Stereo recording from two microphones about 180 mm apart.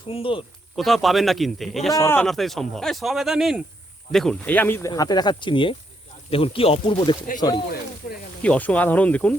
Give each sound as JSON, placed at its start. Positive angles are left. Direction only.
{"t": 0.1, "sound": "speech", "side_deg": 30}
{"t": 0.8, "sound": "speech", "side_deg": 0}
{"t": 1.9, "sound": "speech", "side_deg": 15}
{"t": 2.2, "sound": "speech", "side_deg": 0}
{"t": 4.9, "sound": "speech", "side_deg": 20}
{"t": 8.4, "sound": "speech", "side_deg": 10}